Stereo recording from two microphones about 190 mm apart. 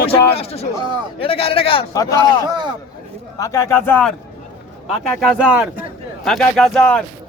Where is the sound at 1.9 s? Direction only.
20° left (ahead or behind).